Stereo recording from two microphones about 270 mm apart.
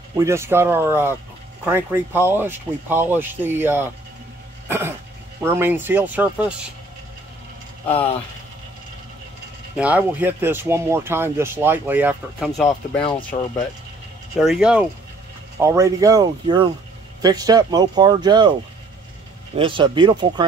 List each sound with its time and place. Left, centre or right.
0.1 s speech: centre
4.6 s cough: centre
5.4 s speech: centre
9.8 s speech: centre
14.4 s speech: centre
19.5 s speech: centre